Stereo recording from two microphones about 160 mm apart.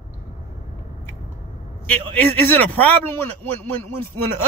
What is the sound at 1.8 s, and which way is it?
A man's voice, 10° left (ahead or behind).